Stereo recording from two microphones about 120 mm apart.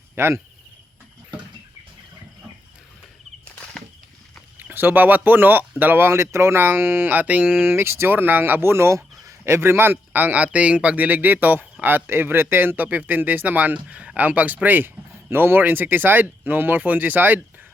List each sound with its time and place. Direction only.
0.2 s speech: 20° right (ahead or behind)
3.5 s a sound: 10° left (ahead or behind)
4.5 s speech: 15° right (ahead or behind)